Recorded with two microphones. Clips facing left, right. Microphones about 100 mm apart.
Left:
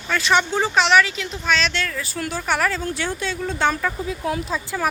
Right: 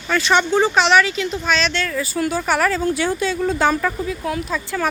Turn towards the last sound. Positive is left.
turn(degrees=25)  # may be behind; listen again after turning